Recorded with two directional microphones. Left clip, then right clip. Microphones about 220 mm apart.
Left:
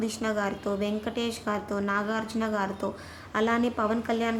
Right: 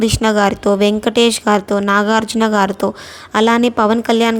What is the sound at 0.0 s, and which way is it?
A woman's voice, 40° right (ahead or behind).